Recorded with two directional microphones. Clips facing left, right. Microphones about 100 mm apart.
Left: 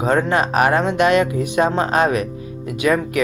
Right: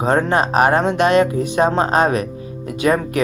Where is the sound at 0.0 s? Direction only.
35° right (ahead or behind).